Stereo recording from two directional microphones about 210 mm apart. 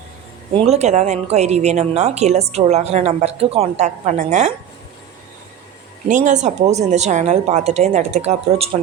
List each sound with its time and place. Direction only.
0.5 s speech: 30° right (ahead or behind)
6.1 s speech: 35° right (ahead or behind)